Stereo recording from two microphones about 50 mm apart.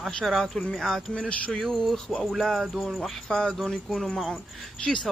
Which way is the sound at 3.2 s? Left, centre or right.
Centre.